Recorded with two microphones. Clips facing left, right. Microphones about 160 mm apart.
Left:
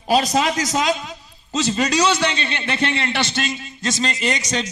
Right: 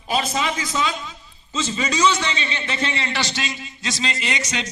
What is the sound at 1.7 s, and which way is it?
A man's voice, 70° left (ahead or behind).